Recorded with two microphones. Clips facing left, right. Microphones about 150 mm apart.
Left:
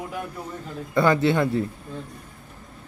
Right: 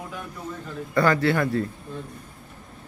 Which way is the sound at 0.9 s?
20° left (ahead or behind).